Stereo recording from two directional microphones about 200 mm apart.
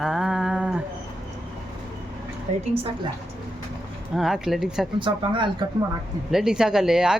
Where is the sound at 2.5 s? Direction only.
35° right (ahead or behind).